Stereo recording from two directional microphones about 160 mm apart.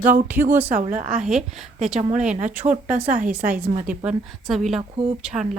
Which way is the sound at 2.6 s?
35° right (ahead or behind).